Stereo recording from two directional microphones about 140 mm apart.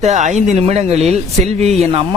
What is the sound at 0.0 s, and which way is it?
Speech, 55° right (ahead or behind).